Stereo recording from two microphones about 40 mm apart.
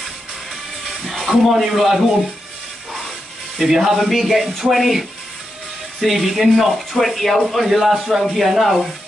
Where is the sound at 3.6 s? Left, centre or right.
Centre.